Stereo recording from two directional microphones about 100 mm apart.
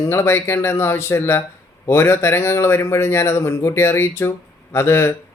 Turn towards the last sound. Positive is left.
turn(degrees=25)  # may be behind; listen again after turning